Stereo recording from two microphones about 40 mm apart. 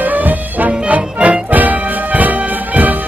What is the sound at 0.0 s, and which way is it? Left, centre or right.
Music, right.